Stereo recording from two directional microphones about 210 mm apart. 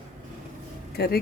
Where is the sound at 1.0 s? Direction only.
50° left (ahead or behind).